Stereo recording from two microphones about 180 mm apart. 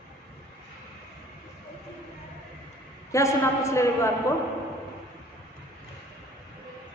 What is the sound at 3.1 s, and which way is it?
A man's voice, 15° left (ahead or behind).